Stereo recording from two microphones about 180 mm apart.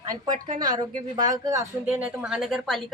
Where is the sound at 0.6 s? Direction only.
25° right (ahead or behind).